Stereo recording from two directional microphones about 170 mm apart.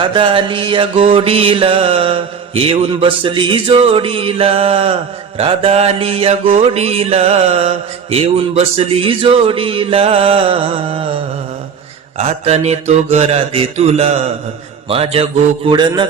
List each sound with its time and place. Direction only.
0.0 s mantra: 30° right (ahead or behind)
12.1 s mantra: 40° right (ahead or behind)